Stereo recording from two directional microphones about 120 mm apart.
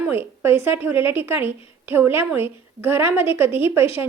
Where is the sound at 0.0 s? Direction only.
20° right (ahead or behind).